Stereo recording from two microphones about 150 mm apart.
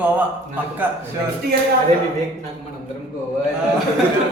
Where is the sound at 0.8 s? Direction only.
10° right (ahead or behind).